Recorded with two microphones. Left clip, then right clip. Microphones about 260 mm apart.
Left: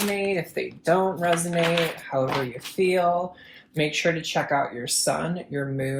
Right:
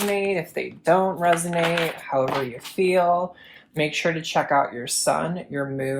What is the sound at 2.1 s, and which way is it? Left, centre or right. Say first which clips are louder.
Speech: right 3 dB; right.